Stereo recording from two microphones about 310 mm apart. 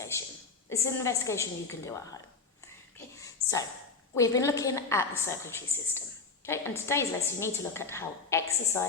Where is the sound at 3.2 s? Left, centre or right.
Centre.